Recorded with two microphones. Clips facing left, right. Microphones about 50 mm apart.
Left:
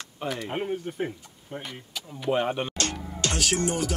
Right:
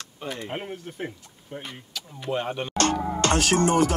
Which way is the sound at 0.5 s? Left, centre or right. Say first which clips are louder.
Left 4 dB; centre.